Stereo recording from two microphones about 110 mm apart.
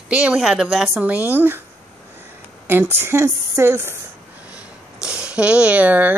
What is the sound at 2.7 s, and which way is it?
Speech, 20° right (ahead or behind).